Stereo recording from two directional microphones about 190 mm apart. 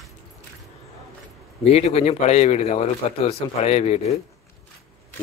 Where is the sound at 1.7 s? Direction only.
35° left (ahead or behind).